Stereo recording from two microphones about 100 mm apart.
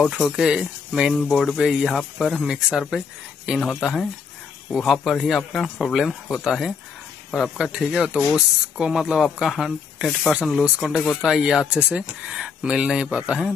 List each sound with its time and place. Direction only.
0.0 s speech: 5° right (ahead or behind)
11.0 s speech: 15° left (ahead or behind)
11.2 s speech: 5° right (ahead or behind)